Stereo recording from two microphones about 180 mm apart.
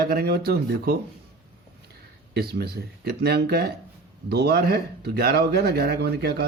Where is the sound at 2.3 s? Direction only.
60° right (ahead or behind).